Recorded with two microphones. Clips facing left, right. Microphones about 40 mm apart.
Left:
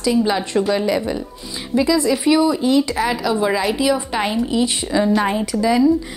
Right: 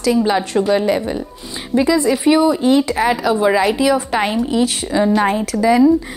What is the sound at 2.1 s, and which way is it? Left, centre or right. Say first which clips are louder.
A woman's voice: right 2 dB; centre.